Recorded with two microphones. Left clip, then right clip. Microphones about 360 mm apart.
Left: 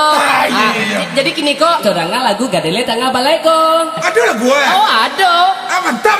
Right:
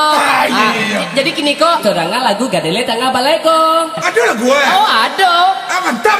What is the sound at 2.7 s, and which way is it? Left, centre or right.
Speech, left.